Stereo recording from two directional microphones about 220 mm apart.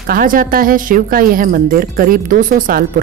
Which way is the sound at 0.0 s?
40° right (ahead or behind).